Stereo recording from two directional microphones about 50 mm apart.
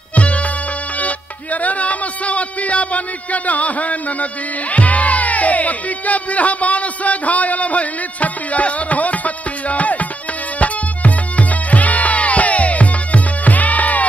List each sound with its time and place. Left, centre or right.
0.1 s music: left